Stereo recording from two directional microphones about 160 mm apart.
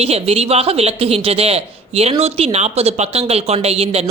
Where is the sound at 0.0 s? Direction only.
40° right (ahead or behind).